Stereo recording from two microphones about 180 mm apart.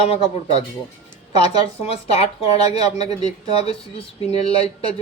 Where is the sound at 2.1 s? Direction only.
35° left (ahead or behind).